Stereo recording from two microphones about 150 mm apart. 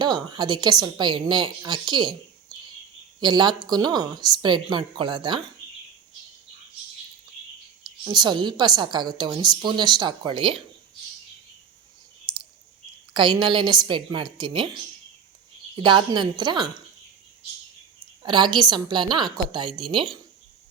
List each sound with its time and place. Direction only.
0.0 s a woman's voice: 30° right (ahead or behind)
3.2 s a woman's voice: 30° right (ahead or behind)
7.9 s a woman's voice: 30° right (ahead or behind)
13.1 s a woman's voice: 30° right (ahead or behind)
18.2 s a woman's voice: 30° right (ahead or behind)